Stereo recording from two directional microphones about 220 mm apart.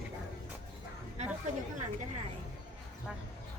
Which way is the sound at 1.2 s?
30° right (ahead or behind).